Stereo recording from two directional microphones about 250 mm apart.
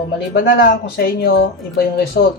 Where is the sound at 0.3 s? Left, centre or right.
Left.